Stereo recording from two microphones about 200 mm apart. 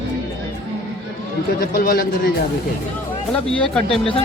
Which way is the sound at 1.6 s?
50° left (ahead or behind).